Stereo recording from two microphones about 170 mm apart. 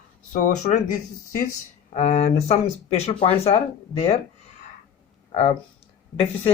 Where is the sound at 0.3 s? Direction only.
50° left (ahead or behind).